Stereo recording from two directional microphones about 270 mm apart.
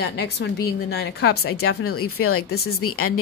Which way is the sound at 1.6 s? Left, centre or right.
Left.